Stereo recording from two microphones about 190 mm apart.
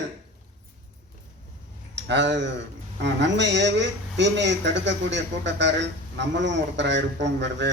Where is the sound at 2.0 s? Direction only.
65° right (ahead or behind).